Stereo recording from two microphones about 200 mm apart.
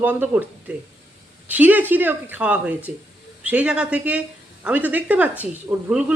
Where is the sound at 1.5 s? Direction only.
10° right (ahead or behind).